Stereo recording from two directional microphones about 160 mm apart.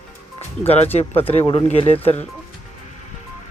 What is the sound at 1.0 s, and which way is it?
Speech, 40° left (ahead or behind).